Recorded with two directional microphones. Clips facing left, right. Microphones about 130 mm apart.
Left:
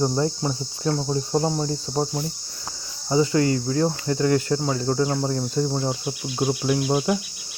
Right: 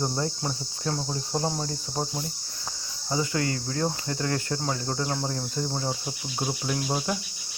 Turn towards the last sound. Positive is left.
turn(degrees=10)  # may be behind; listen again after turning